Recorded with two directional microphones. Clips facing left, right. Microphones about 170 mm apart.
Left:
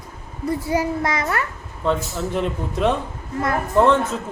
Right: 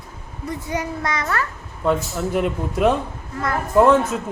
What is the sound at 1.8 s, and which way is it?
A man's voice, 5° right (ahead or behind).